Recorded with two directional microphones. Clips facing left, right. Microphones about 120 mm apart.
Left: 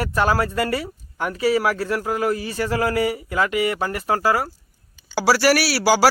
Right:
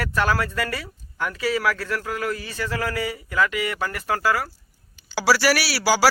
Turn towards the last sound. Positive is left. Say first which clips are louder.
# left 4 dB
turn(degrees=50)  # may be behind; listen again after turning